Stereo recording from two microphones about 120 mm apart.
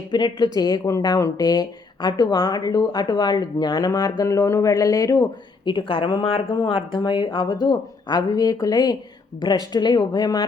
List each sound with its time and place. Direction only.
0.1 s speech: 35° left (ahead or behind)